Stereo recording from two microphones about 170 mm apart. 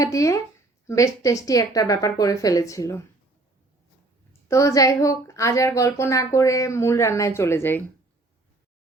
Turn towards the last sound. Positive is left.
turn(degrees=15)  # may be behind; listen again after turning